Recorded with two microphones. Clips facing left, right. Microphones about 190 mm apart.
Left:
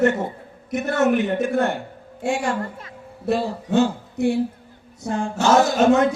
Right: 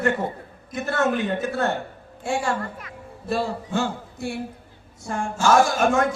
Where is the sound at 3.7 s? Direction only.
20° left (ahead or behind).